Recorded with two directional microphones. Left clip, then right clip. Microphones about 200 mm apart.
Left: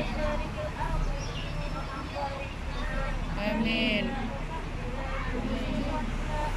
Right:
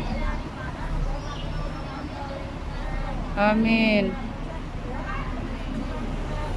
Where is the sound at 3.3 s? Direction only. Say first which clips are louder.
Right 9 dB; 15° right (ahead or behind).